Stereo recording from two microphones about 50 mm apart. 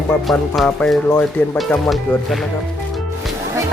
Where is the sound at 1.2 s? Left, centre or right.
Left.